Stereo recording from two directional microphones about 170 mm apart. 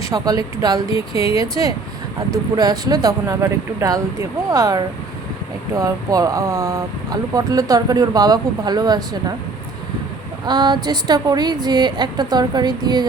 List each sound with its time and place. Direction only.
0.0 s speech: 20° right (ahead or behind)
10.4 s speech: 25° right (ahead or behind)